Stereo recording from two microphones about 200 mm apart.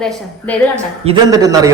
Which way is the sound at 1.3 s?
15° right (ahead or behind).